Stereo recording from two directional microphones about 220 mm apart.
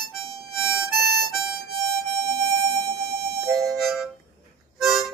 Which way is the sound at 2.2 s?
15° right (ahead or behind).